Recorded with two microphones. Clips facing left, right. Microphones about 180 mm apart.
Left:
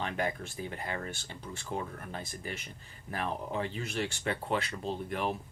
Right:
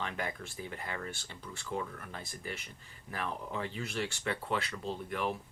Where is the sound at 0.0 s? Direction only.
25° left (ahead or behind).